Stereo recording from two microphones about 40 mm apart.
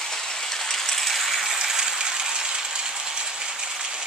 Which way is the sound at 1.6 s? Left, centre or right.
Centre.